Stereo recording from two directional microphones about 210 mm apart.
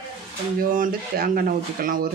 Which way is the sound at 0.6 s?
40° right (ahead or behind).